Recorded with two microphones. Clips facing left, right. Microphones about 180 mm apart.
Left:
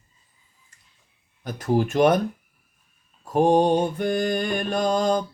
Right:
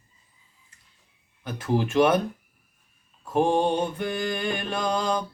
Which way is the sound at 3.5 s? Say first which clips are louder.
Left 4 dB; 40° left (ahead or behind).